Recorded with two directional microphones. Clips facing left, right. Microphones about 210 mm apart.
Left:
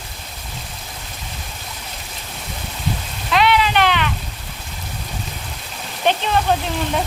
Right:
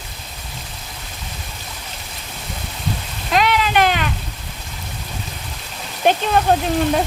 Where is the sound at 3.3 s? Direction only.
45° right (ahead or behind).